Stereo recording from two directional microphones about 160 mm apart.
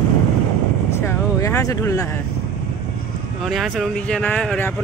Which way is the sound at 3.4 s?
Centre (ahead or behind).